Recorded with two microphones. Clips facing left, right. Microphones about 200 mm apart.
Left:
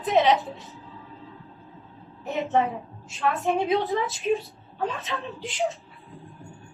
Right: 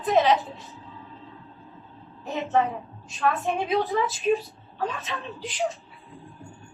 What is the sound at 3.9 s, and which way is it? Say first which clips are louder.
A woman's voice: right 1 dB; centre (ahead or behind).